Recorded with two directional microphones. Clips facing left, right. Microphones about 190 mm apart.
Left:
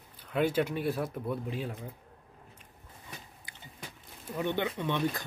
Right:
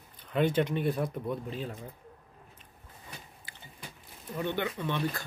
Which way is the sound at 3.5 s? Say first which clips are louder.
Right 1 dB; 20° left (ahead or behind).